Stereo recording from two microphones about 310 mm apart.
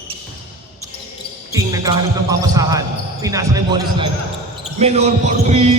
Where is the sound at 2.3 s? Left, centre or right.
Centre.